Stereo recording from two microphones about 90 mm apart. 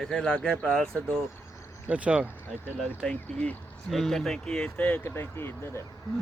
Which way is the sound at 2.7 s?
10° left (ahead or behind).